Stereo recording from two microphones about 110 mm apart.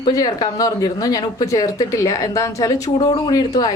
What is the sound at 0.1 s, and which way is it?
Speech, 35° left (ahead or behind).